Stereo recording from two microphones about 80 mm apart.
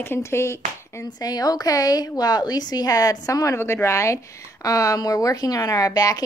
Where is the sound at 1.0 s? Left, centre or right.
Left.